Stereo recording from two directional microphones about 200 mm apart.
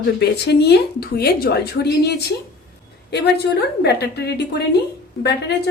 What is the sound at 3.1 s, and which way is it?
A woman's voice, 55° left (ahead or behind).